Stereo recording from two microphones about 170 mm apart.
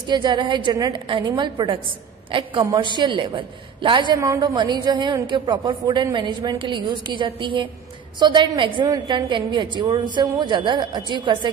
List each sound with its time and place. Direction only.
0.0 s a woman's voice: 25° right (ahead or behind)